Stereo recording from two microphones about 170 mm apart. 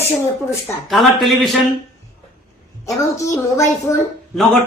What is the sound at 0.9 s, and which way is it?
Speech, centre (ahead or behind).